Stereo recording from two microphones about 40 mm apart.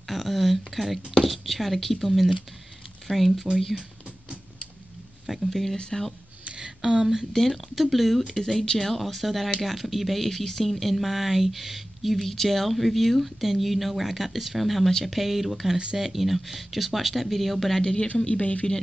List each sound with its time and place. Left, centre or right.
0.1 s a sound: centre
0.7 s speech: centre
5.2 s speech: centre
5.8 s speech: centre
6.4 s a sound: right
6.8 s speech: centre
7.3 s speech: centre
8.4 s speech: centre
18.2 s speech: left